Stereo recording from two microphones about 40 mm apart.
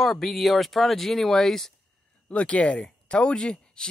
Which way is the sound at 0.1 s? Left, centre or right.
Centre.